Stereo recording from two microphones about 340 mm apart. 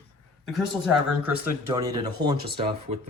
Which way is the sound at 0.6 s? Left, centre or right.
Centre.